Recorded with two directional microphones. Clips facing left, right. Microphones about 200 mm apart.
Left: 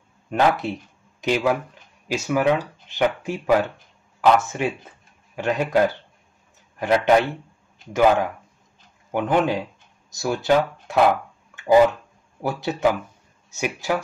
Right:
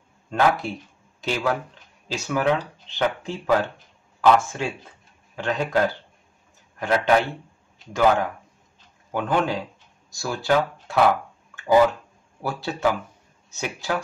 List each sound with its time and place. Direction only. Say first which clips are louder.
0.3 s speech: left 1 dB; 20° left (ahead or behind)
9.1 s speech: left 3 dB; 20° left (ahead or behind)